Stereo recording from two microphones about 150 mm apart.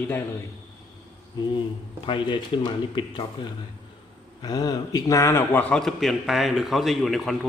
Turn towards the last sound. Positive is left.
turn(degrees=0)  # may be behind; listen again after turning